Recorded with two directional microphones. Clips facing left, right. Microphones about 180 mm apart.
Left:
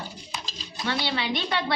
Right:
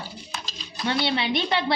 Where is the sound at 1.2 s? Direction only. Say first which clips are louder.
Right 3 dB; 25° right (ahead or behind).